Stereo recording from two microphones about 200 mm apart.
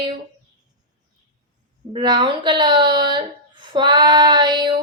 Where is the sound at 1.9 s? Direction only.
20° right (ahead or behind).